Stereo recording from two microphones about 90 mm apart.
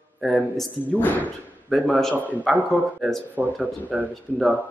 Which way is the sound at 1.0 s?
20° left (ahead or behind).